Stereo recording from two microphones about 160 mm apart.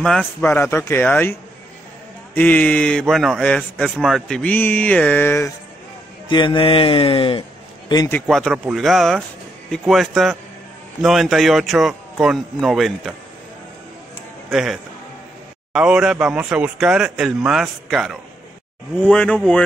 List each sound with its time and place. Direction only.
0.0 s a man's voice: 5° left (ahead or behind)
2.3 s a man's voice: 10° left (ahead or behind)
6.2 s a man's voice: 30° left (ahead or behind)
8.1 s speech: centre (ahead or behind)
14.5 s a man's voice: centre (ahead or behind)